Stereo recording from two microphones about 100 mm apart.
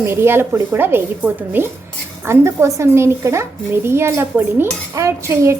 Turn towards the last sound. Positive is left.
turn(degrees=-30)  # may be behind; listen again after turning